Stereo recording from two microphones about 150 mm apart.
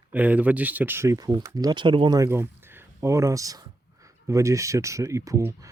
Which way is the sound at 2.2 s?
15° right (ahead or behind).